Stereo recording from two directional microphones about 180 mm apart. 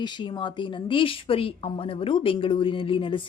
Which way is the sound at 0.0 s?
25° left (ahead or behind).